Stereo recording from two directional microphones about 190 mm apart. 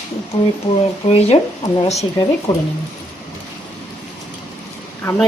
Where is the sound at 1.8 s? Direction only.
30° left (ahead or behind).